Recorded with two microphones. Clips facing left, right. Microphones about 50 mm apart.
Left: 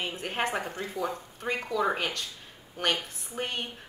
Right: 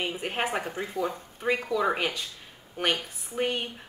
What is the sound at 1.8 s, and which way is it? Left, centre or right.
Speech, centre.